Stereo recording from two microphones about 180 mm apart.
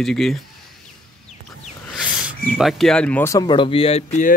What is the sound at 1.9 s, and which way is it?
Speech, 5° right (ahead or behind).